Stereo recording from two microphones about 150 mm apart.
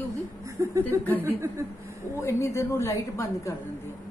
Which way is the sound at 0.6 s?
20° right (ahead or behind).